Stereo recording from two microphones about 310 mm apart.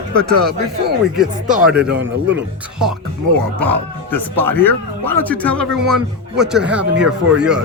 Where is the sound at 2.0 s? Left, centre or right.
Right.